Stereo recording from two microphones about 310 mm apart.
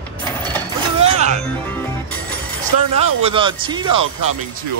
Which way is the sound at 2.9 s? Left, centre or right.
Centre.